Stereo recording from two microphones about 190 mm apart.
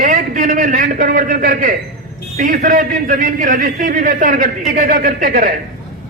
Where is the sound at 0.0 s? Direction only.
45° right (ahead or behind).